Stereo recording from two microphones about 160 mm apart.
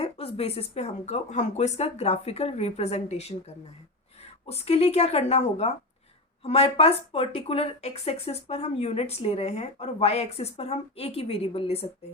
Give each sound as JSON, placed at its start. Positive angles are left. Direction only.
{"t": 0.0, "sound": "speech", "side_deg": 35}
{"t": 4.4, "sound": "speech", "side_deg": 40}